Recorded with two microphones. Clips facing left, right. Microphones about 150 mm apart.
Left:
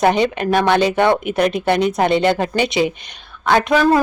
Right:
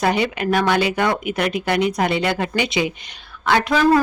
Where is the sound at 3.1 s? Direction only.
20° left (ahead or behind).